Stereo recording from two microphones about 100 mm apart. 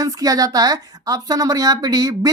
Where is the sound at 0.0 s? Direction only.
35° right (ahead or behind).